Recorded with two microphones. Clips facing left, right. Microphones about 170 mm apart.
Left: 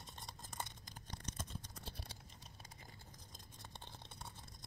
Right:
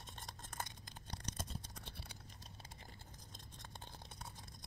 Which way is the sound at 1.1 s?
35° right (ahead or behind).